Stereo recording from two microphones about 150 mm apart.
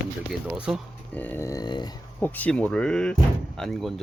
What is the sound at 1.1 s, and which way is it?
Dog, 15° left (ahead or behind).